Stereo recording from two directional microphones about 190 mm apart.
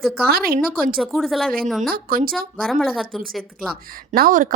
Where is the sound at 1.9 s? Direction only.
50° right (ahead or behind).